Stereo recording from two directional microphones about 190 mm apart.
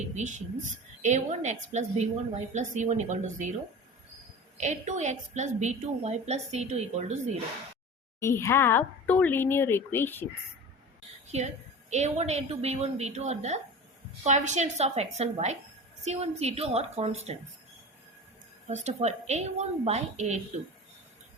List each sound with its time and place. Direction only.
0.1 s a woman's voice: 40° right (ahead or behind)
4.5 s a woman's voice: 40° right (ahead or behind)
8.2 s speech: 15° left (ahead or behind)
11.3 s a woman's voice: 35° right (ahead or behind)
18.7 s a woman's voice: 35° right (ahead or behind)